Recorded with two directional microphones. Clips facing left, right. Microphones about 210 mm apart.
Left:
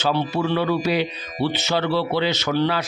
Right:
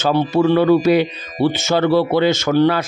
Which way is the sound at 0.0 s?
50° right (ahead or behind).